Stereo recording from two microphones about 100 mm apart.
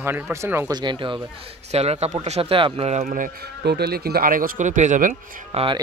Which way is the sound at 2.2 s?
80° right.